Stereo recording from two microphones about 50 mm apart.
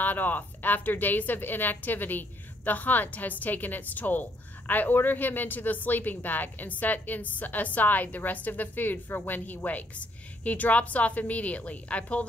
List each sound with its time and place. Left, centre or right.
0.0 s a woman's voice: left